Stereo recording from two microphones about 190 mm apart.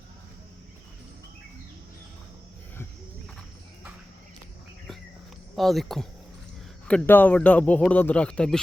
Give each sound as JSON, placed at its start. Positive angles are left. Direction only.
{"t": 5.5, "sound": "speech", "side_deg": 0}